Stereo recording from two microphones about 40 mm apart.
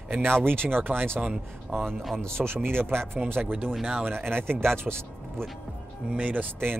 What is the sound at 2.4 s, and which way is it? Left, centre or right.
Speech, right.